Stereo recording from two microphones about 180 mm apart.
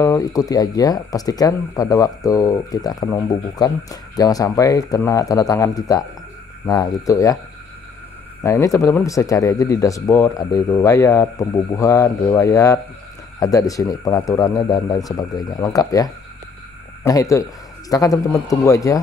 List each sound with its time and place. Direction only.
0.0 s speech: 20° left (ahead or behind)
8.4 s speech: 15° left (ahead or behind)